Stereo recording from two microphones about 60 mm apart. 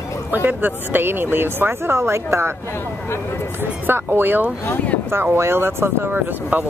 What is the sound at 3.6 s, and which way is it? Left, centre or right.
Speech, right.